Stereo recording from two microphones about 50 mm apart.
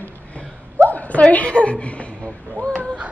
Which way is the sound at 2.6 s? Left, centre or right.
Centre.